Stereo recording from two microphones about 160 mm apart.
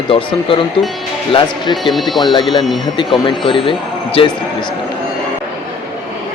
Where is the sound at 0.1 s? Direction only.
35° left (ahead or behind).